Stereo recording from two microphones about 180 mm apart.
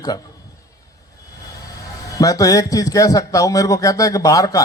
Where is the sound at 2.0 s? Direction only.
20° left (ahead or behind).